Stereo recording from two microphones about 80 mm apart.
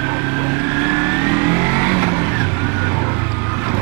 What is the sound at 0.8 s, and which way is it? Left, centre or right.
Vehicle, right.